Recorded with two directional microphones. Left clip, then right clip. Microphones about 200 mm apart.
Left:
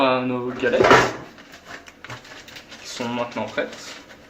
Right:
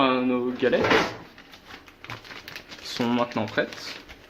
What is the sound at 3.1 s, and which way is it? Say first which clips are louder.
Speech: even; 55° right (ahead or behind).